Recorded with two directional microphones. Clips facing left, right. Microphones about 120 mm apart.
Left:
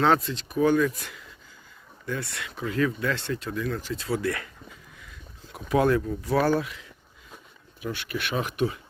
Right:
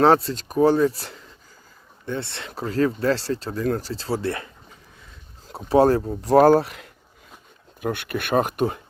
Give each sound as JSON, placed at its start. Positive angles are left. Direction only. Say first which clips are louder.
{"t": 0.0, "sound": "speech", "louder": "right 5 dB", "side_deg": -35}
{"t": 7.8, "sound": "speech", "louder": "right 5 dB", "side_deg": -55}